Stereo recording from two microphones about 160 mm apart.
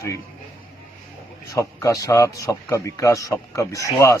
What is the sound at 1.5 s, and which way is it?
A man's voice, 20° left (ahead or behind).